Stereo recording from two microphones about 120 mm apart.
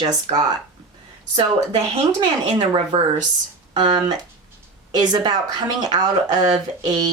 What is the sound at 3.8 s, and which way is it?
Speech, 35° right (ahead or behind).